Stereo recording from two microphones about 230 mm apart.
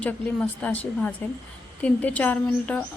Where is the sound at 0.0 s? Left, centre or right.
Centre.